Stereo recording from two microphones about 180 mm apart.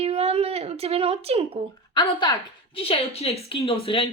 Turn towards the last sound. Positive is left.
turn(degrees=30)  # may be behind; listen again after turning